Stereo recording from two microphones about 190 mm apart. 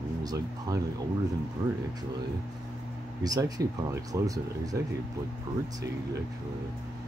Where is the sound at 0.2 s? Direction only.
20° right (ahead or behind).